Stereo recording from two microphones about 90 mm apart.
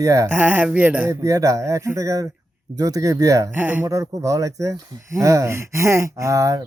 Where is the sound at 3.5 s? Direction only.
20° right (ahead or behind).